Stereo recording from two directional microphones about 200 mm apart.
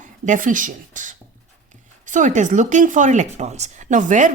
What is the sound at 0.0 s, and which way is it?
A woman's voice, 40° right (ahead or behind).